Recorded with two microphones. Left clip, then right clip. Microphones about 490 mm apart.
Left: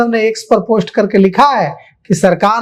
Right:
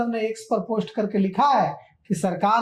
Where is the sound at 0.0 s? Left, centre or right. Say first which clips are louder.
Left 13 dB; left.